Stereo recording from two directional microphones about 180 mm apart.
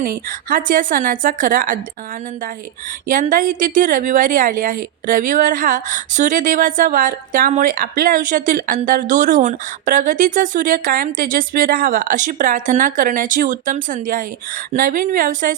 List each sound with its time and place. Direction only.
0.0 s a woman's voice: 50° right (ahead or behind)
3.1 s a woman's voice: 45° right (ahead or behind)